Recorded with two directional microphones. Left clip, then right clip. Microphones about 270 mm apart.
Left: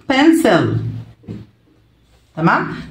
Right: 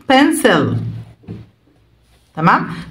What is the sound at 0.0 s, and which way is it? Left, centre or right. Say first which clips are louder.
Speech: right 1 dB; right.